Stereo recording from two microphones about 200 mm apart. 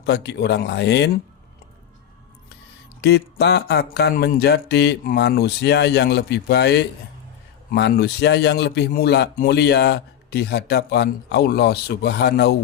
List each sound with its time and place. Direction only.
0.0 s a man's voice: 55° left (ahead or behind)
3.0 s a man's voice: 55° left (ahead or behind)